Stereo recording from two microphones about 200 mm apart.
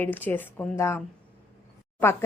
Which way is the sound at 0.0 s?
10° left (ahead or behind).